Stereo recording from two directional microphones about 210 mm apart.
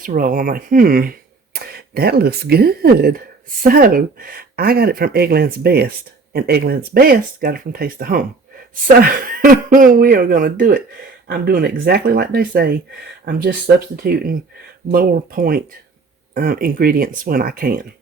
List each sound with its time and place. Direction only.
0.0 s a woman's voice: 40° right (ahead or behind)